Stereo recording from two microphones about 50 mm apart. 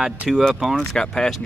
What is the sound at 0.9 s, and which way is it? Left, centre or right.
Speech, centre.